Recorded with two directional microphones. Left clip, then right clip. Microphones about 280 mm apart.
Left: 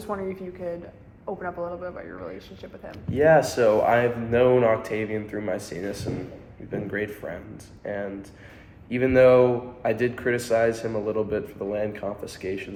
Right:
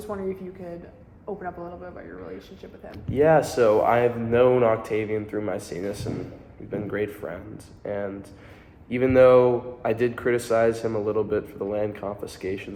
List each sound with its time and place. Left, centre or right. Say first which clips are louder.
0.1 s a man's voice: left 1 dB; centre
2.9 s speech: left 1 dB; centre